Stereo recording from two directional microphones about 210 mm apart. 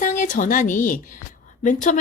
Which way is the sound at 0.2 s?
40° left (ahead or behind).